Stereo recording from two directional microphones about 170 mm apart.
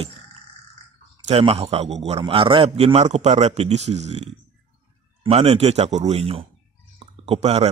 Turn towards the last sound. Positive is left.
turn(degrees=-40)  # may be behind; listen again after turning